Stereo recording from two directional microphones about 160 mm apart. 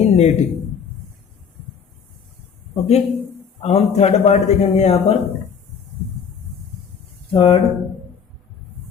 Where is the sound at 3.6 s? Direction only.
40° left (ahead or behind).